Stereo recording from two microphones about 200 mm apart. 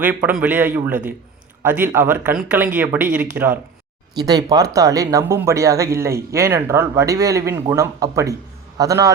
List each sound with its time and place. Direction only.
0.0 s speech: 10° right (ahead or behind)
4.2 s speech: 20° right (ahead or behind)